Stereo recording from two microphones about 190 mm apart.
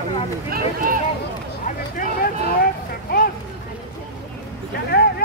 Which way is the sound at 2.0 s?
50° left (ahead or behind).